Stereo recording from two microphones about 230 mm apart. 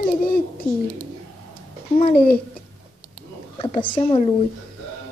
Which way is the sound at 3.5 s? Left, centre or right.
Left.